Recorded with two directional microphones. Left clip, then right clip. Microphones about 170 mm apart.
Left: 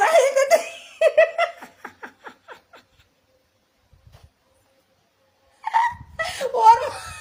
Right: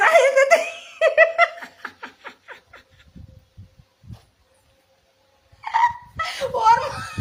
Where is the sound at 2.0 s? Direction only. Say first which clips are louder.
Right 2 dB; 45° left (ahead or behind).